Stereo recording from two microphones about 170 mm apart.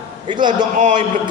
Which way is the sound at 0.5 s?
45° right (ahead or behind).